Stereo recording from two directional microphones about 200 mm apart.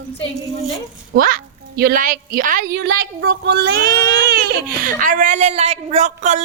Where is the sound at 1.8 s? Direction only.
45° right (ahead or behind).